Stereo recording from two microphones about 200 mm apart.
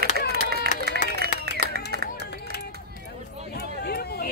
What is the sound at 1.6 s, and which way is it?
Clapping, 50° right (ahead or behind).